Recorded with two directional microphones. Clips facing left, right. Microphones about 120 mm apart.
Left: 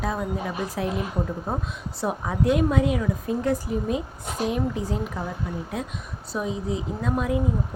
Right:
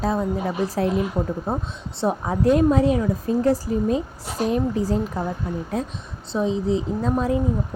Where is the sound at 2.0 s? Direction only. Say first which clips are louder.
Right 4 dB; 30° right (ahead or behind).